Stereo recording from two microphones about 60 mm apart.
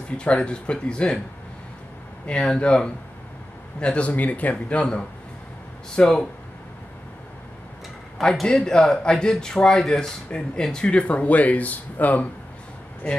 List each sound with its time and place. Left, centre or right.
0.2 s speech: centre
2.2 s a man's voice: centre
8.2 s speech: centre; by 12.3 s left